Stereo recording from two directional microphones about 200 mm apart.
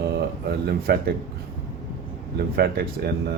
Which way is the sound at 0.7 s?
50° right (ahead or behind).